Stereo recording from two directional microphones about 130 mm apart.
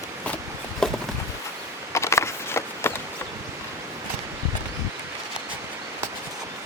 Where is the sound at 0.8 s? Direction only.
5° left (ahead or behind).